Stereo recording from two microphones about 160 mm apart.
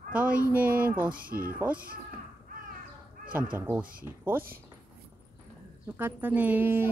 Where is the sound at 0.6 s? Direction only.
65° right (ahead or behind).